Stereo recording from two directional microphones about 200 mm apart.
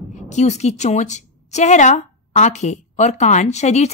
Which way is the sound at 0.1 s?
35° left (ahead or behind).